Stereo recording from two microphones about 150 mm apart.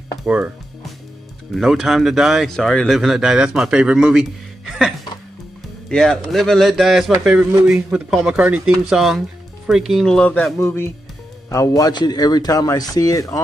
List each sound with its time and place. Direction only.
0.2 s speech: 10° right (ahead or behind)
1.5 s a man's voice: 5° right (ahead or behind); by 13.4 s 20° left (ahead or behind)